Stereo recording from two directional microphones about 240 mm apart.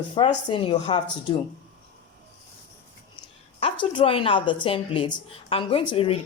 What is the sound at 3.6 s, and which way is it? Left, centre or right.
A woman's voice, left.